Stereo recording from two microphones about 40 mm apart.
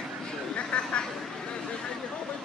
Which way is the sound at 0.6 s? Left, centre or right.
Left.